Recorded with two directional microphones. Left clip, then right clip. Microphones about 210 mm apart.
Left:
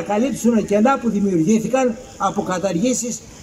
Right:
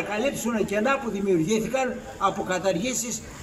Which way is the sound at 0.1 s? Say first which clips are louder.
Left 10 dB; 45° left (ahead or behind).